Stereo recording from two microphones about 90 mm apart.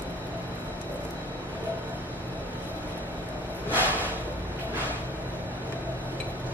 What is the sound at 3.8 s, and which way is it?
Music, 20° left (ahead or behind).